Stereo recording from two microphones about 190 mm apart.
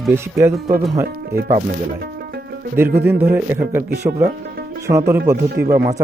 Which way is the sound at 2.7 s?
10° right (ahead or behind).